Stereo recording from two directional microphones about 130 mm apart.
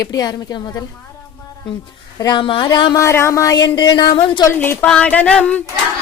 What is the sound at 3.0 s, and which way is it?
A woman's voice, 20° left (ahead or behind).